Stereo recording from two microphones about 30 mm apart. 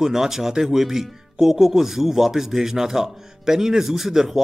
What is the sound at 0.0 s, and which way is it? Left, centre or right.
Speech, centre.